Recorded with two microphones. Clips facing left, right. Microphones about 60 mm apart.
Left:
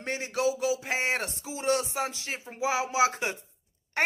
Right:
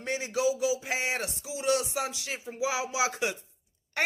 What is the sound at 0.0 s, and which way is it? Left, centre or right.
Speech, left.